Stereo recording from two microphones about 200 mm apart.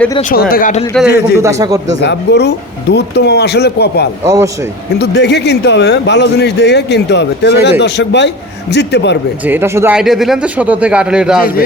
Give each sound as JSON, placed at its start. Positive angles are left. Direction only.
{"t": 0.2, "sound": "speech", "side_deg": 40}
{"t": 1.0, "sound": "speech", "side_deg": 55}
{"t": 1.4, "sound": "a man's voice", "side_deg": -15}
{"t": 2.0, "sound": "speech", "side_deg": 55}
{"t": 9.5, "sound": "speech", "side_deg": -10}